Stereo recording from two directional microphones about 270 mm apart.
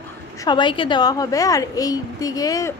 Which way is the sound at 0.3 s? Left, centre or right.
Centre.